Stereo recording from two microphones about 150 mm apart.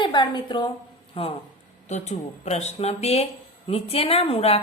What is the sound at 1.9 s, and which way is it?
A woman's voice, 50° left (ahead or behind).